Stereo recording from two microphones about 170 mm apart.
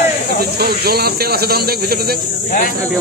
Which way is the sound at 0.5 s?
65° right (ahead or behind).